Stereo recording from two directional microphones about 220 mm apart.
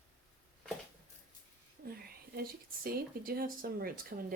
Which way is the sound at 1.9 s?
45° right (ahead or behind).